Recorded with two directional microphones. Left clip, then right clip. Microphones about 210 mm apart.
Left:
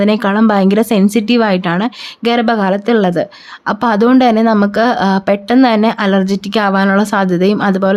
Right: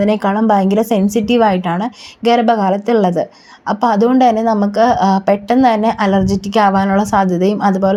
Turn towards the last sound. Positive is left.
turn(degrees=20)  # may be behind; listen again after turning